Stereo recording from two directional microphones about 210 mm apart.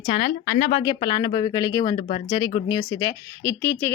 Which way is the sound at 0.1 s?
35° left (ahead or behind).